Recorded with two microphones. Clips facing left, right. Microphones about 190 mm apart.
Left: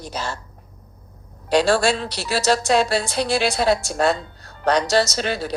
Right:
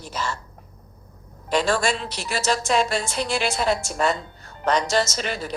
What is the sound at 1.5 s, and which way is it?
A woman's voice, 30° left (ahead or behind).